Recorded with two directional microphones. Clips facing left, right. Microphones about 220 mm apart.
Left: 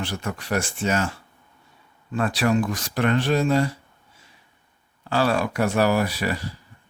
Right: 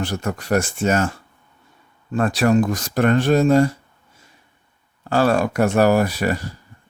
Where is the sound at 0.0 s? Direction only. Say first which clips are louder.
Right 5 dB; 45° right (ahead or behind).